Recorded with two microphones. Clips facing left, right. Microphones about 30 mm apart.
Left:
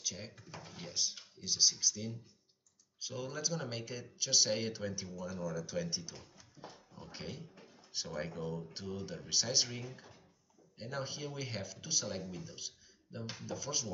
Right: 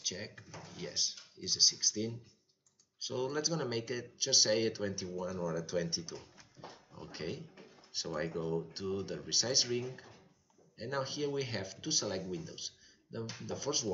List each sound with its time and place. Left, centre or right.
0.0 s speech: centre